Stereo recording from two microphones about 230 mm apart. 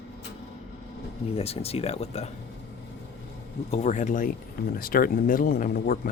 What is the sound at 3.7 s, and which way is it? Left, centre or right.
Speech, left.